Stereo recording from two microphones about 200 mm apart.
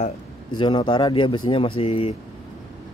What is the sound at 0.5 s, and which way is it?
Speech, 25° left (ahead or behind).